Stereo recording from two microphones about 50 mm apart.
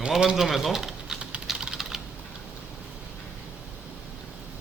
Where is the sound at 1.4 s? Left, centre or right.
Centre.